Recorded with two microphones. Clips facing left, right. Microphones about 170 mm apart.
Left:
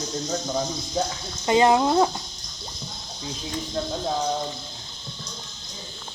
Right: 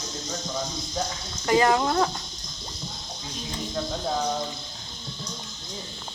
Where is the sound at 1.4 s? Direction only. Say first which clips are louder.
Left 3 dB; 20° left (ahead or behind).